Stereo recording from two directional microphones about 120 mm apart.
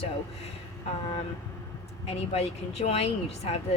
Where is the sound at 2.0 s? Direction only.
60° left (ahead or behind).